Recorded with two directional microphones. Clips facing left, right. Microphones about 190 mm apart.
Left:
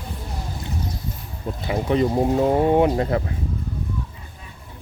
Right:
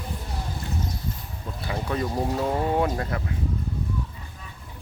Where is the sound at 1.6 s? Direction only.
20° left (ahead or behind).